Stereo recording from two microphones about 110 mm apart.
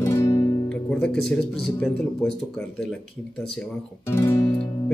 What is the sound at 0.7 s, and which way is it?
Speech, 5° left (ahead or behind).